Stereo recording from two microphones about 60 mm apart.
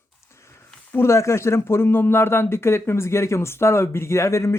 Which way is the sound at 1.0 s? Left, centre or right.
Left.